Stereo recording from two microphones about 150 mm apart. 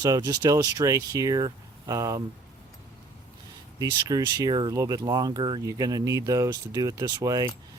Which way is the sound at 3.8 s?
25° right (ahead or behind).